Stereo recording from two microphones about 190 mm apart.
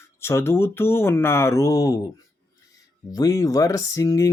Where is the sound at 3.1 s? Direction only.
20° left (ahead or behind).